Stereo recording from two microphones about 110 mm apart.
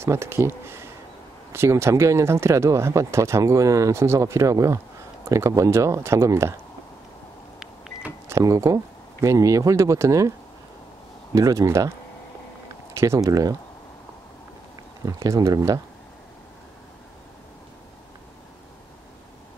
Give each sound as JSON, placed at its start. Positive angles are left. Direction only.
{"t": 0.0, "sound": "speech", "side_deg": -25}
{"t": 7.9, "sound": "power windows", "side_deg": 35}
{"t": 8.3, "sound": "speech", "side_deg": -25}
{"t": 11.3, "sound": "speech", "side_deg": -30}
{"t": 12.9, "sound": "speech", "side_deg": -25}
{"t": 15.0, "sound": "speech", "side_deg": -35}